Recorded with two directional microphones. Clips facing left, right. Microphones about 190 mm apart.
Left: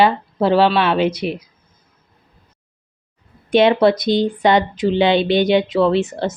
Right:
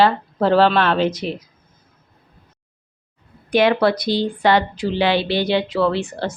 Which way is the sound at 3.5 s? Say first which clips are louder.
Left 3 dB; 25° left (ahead or behind).